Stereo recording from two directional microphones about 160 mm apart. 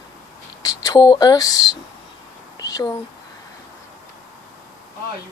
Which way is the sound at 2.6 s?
20° left (ahead or behind).